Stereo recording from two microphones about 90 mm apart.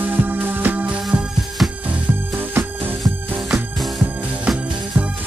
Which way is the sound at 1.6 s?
5° right (ahead or behind).